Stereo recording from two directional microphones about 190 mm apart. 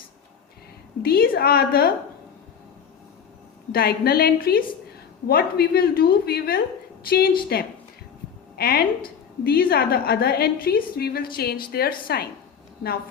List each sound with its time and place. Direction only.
1.0 s a woman's voice: 50° left (ahead or behind)
3.7 s a woman's voice: 55° left (ahead or behind)